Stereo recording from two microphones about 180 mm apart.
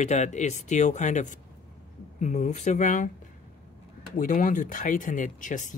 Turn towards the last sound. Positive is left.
turn(degrees=45)  # may be behind; listen again after turning